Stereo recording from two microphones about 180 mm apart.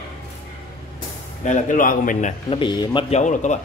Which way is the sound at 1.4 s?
45° left (ahead or behind).